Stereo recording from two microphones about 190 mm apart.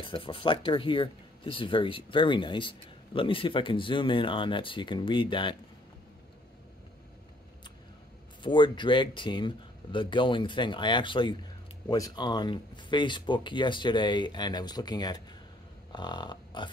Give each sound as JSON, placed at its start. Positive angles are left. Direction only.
{"t": 0.0, "sound": "speech", "side_deg": 25}
{"t": 8.4, "sound": "speech", "side_deg": 25}
{"t": 15.9, "sound": "a sound", "side_deg": 25}